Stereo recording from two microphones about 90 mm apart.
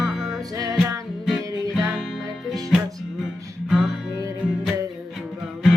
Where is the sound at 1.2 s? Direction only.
5° right (ahead or behind).